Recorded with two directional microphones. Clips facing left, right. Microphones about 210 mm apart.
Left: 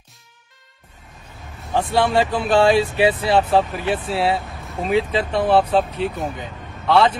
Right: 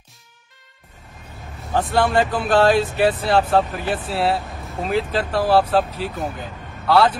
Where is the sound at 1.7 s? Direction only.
Centre (ahead or behind).